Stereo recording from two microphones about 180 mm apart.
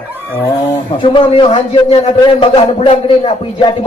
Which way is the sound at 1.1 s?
30° left (ahead or behind).